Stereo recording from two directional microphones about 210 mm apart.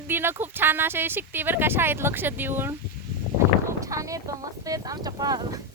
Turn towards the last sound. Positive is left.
turn(degrees=-20)  # may be behind; listen again after turning